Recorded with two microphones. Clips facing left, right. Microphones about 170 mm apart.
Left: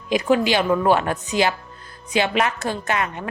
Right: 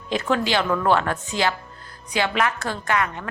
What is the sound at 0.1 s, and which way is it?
A woman's voice, 15° left (ahead or behind).